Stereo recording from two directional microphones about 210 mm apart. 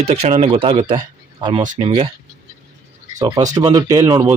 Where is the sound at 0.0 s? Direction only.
30° right (ahead or behind).